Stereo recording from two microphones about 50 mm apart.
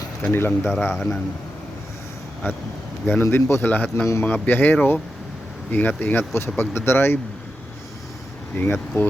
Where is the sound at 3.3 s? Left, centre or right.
Left.